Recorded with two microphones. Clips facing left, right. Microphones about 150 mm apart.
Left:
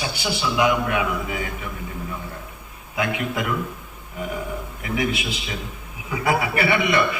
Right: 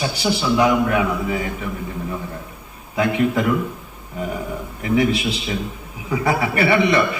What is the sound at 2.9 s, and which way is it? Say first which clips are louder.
Speech: right 6 dB; 35° right (ahead or behind).